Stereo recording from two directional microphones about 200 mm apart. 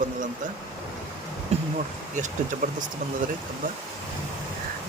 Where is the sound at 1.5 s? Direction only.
30° right (ahead or behind).